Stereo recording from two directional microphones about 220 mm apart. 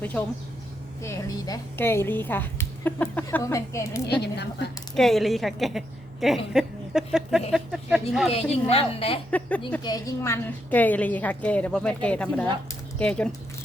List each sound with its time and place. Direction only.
0.0 s speech: 5° left (ahead or behind)
4.0 s a woman's voice: 50° left (ahead or behind)
4.9 s a woman's voice: centre (ahead or behind)
8.3 s a woman's voice: 25° left (ahead or behind)
9.3 s a woman's voice: 5° left (ahead or behind)